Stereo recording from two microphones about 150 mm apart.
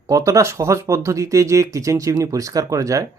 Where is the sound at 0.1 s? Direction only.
20° right (ahead or behind).